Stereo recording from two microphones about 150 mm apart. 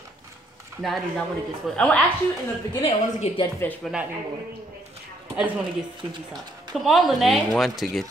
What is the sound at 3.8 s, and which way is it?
Speech, 5° right (ahead or behind).